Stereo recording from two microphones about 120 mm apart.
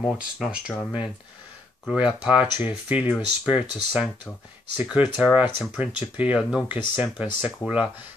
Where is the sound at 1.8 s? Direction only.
10° right (ahead or behind).